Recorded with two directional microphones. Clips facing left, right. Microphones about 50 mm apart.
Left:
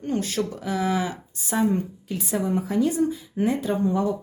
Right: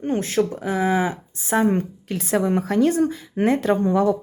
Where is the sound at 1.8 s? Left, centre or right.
Right.